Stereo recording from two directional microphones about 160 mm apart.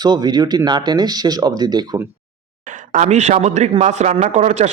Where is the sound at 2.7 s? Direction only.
50° right (ahead or behind).